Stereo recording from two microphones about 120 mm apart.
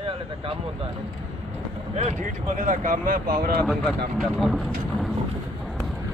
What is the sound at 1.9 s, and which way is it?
Speech, 80° right.